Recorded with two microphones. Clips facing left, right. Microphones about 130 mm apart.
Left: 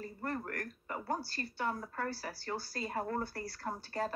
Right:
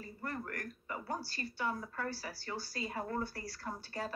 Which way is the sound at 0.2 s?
45° left (ahead or behind).